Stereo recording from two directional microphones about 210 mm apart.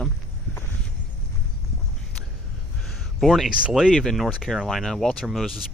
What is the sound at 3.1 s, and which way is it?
Speech, centre (ahead or behind).